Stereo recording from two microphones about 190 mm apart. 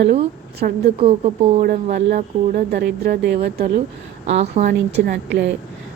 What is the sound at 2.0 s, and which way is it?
Speech, 60° right (ahead or behind).